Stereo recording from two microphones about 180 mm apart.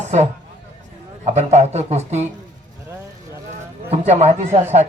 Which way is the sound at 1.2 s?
40° right (ahead or behind).